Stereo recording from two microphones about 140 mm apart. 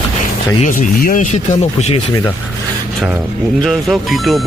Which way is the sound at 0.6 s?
70° left (ahead or behind).